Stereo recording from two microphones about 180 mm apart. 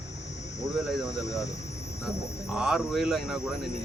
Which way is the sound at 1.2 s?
15° left (ahead or behind).